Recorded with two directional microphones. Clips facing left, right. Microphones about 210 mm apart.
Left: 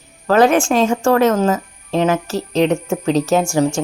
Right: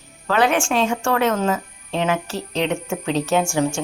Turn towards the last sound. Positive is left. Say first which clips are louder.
# left 4 dB
turn(degrees=40)  # may be behind; listen again after turning